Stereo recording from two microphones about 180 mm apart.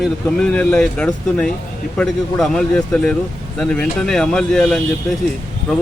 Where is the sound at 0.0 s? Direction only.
5° left (ahead or behind).